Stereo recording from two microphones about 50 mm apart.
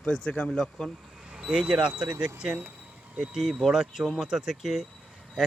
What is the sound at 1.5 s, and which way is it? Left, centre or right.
Speech, centre.